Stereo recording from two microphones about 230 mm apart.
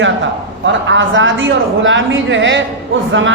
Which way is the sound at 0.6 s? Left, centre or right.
Right.